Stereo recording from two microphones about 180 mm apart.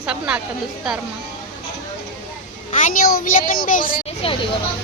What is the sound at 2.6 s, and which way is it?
A child's voice, 45° left (ahead or behind).